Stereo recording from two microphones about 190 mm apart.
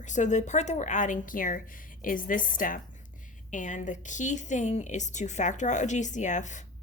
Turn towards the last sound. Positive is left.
turn(degrees=40)  # may be behind; listen again after turning